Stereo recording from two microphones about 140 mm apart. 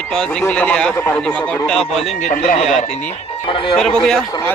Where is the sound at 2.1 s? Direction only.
60° left (ahead or behind).